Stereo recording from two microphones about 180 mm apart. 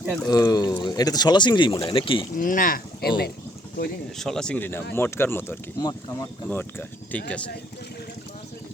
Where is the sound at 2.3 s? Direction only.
50° left (ahead or behind).